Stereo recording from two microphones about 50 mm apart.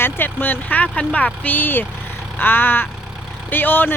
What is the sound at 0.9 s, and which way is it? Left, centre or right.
Speech, centre.